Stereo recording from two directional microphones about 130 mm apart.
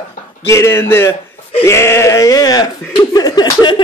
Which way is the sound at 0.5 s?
20° left (ahead or behind).